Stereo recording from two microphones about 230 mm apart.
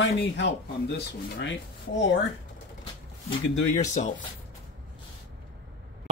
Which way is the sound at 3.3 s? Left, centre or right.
Left.